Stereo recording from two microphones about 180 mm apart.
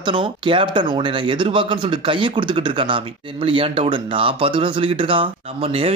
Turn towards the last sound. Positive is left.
turn(degrees=-30)  # may be behind; listen again after turning